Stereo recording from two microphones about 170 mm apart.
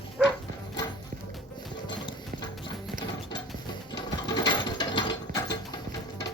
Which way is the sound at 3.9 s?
25° left (ahead or behind).